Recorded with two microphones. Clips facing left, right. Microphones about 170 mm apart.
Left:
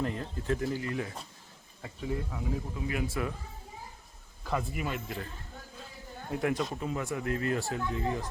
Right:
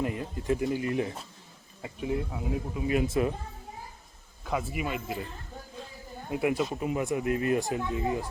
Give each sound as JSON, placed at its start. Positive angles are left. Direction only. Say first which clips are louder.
{"t": 0.0, "sound": "speech", "louder": "right 2 dB", "side_deg": -10}
{"t": 4.4, "sound": "speech", "louder": "right 2 dB", "side_deg": -5}
{"t": 6.3, "sound": "speech", "louder": "right 3 dB", "side_deg": -10}